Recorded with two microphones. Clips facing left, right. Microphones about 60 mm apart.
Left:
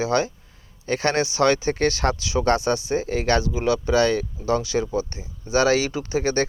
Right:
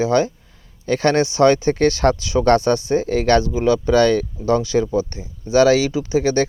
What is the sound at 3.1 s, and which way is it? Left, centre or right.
Speech, left.